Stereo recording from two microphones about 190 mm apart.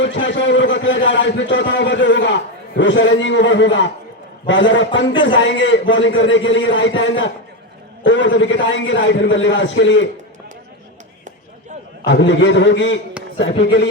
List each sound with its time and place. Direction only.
0.0 s a man's voice: 75° left (ahead or behind)
12.0 s a man's voice: 70° left (ahead or behind)